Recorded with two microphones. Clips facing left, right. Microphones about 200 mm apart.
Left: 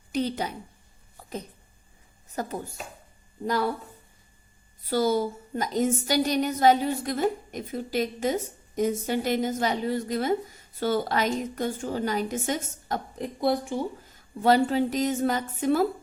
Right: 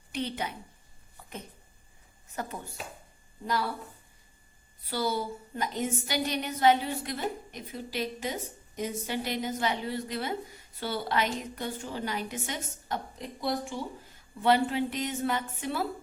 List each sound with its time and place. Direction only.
0.1 s a woman's voice: 40° left (ahead or behind)
1.1 s a sound: 40° left (ahead or behind)
2.3 s a woman's voice: 40° left (ahead or behind)
4.9 s a woman's voice: 45° left (ahead or behind)